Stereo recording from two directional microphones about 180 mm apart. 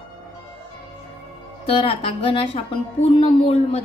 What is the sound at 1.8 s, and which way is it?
A woman's voice, 30° left (ahead or behind).